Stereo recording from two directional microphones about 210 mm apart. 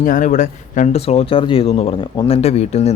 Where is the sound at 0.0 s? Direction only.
40° left (ahead or behind).